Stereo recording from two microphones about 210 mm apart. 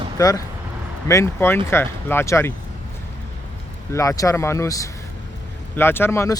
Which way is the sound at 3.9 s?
15° left (ahead or behind).